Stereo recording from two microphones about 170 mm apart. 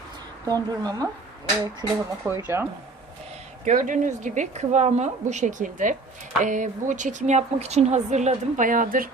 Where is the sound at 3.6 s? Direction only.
50° right (ahead or behind).